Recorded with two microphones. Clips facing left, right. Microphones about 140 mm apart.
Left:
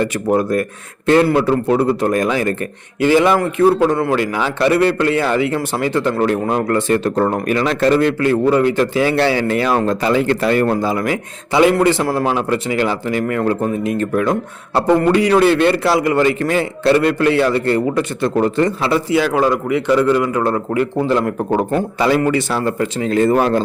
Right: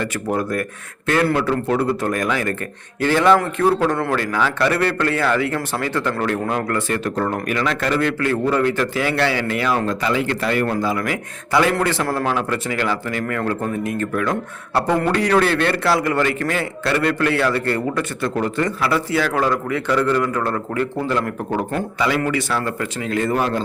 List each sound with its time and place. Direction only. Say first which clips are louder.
0.0 s a man's voice: left 6 dB; 20° left (ahead or behind)
3.0 s a man's voice: left 2 dB; 10° left (ahead or behind); by 23.4 s 30° left (ahead or behind)